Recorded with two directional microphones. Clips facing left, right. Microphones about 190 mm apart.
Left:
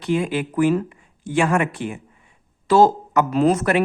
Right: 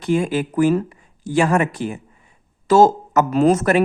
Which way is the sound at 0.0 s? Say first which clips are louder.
Right 2 dB; 45° right (ahead or behind).